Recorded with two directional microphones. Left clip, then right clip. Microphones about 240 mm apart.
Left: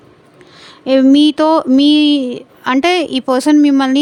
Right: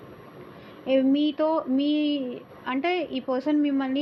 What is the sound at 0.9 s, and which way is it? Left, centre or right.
Speech, left.